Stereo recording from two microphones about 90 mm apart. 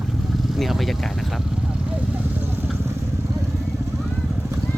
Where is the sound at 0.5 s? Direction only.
Centre (ahead or behind).